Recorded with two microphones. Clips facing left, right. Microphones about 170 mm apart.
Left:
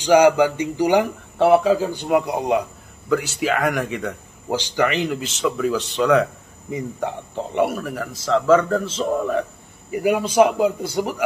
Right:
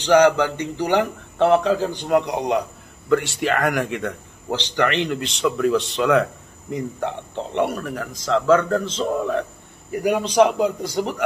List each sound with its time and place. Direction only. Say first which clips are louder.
0.0 s a man's voice: left 1 dB; 10° left (ahead or behind)